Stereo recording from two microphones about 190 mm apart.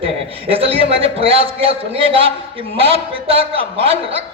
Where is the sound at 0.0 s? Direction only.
30° right (ahead or behind).